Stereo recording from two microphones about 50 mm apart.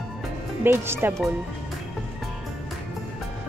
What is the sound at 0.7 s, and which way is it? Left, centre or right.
Speech, right.